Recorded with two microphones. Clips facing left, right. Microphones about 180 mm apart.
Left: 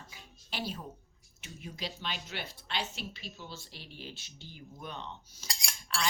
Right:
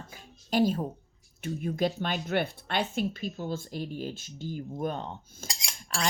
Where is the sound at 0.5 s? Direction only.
45° right (ahead or behind).